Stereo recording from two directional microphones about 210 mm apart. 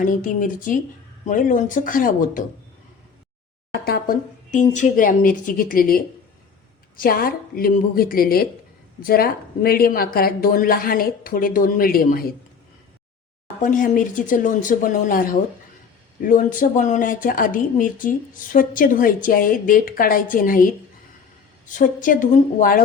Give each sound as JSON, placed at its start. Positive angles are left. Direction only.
{"t": 0.0, "sound": "speech", "side_deg": 40}
{"t": 3.7, "sound": "a woman's voice", "side_deg": 45}
{"t": 13.6, "sound": "speech", "side_deg": 40}
{"t": 21.8, "sound": "speech", "side_deg": 40}